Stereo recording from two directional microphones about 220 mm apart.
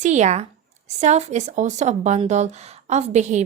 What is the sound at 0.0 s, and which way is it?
A woman's voice, 30° right (ahead or behind).